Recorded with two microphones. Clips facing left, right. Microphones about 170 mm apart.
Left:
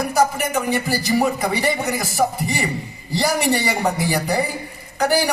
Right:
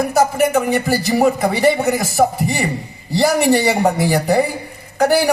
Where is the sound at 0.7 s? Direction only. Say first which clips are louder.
Right 3 dB; 50° right (ahead or behind).